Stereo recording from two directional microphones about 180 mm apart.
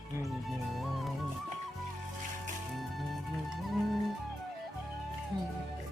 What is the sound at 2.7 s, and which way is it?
Music, centre (ahead or behind).